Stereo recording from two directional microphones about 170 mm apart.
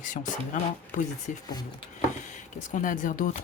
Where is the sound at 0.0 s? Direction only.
50° left (ahead or behind).